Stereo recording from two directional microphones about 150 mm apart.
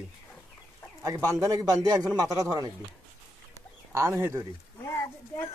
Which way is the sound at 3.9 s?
20° right (ahead or behind).